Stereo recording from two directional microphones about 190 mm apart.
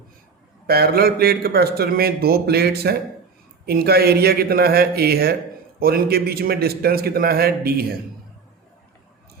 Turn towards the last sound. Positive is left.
turn(degrees=-55)  # may be behind; listen again after turning